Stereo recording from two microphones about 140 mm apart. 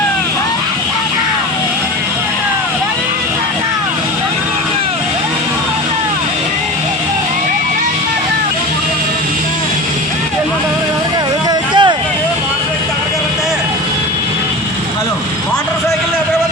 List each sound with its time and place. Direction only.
11.7 s vehicle: 35° right (ahead or behind)